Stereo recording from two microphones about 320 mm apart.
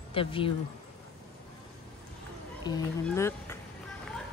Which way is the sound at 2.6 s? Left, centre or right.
Centre.